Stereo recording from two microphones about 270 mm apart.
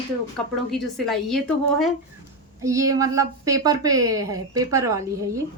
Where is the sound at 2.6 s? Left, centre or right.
Centre.